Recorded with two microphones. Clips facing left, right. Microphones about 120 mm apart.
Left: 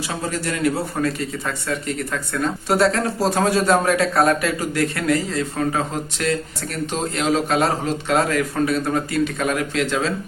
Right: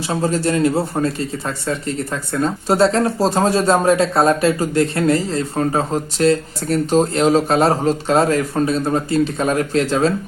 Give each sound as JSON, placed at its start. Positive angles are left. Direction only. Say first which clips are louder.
{"t": 0.1, "sound": "speech", "louder": "right 9 dB", "side_deg": -30}